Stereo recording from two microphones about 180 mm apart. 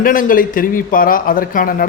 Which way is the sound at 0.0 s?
50° left (ahead or behind).